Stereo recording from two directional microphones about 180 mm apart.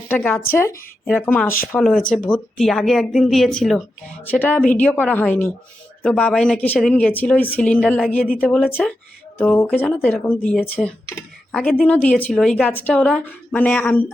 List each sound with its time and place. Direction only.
0.1 s speech: 10° left (ahead or behind)